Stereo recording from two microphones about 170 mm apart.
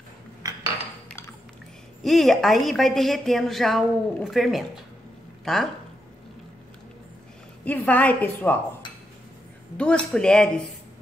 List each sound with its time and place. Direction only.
2.0 s a woman's voice: centre (ahead or behind)
7.6 s a woman's voice: 10° left (ahead or behind)
9.8 s a woman's voice: 5° left (ahead or behind)